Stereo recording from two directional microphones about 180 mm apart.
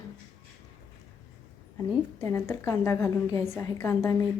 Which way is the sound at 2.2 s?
15° left (ahead or behind).